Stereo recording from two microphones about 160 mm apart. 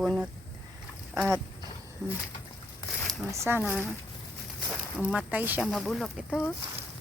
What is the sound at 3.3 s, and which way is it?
Speech, 15° right (ahead or behind).